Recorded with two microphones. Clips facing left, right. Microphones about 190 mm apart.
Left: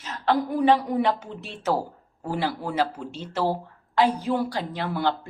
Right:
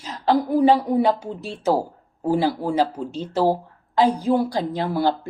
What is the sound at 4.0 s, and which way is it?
Speech, 15° right (ahead or behind).